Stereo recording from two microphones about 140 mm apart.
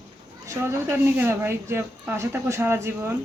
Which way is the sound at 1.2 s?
15° right (ahead or behind).